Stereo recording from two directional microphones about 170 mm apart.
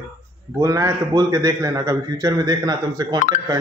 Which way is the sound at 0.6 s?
20° right (ahead or behind).